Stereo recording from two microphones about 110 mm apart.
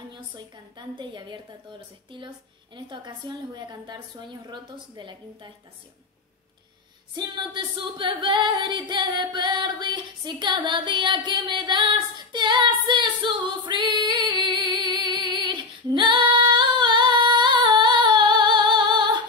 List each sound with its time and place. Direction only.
0.7 s singing: 45° right (ahead or behind)
7.2 s singing: 45° right (ahead or behind)